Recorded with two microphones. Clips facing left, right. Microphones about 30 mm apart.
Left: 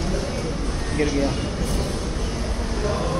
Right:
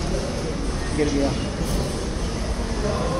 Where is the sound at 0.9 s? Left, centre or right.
Centre.